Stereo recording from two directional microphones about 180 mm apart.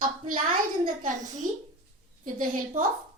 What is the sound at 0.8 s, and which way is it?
A woman's voice, 45° right (ahead or behind).